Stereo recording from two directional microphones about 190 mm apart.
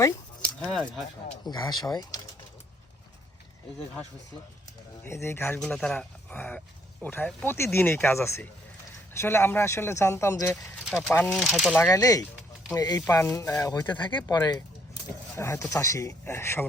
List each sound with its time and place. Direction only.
0.6 s speech: centre (ahead or behind)
1.5 s speech: 20° left (ahead or behind)
5.0 s speech: 15° left (ahead or behind)
5.5 s speech: centre (ahead or behind)
11.3 s speech: centre (ahead or behind)
11.9 s speech: 20° left (ahead or behind)